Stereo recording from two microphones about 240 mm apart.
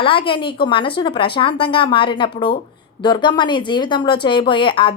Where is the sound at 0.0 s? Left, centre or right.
Left.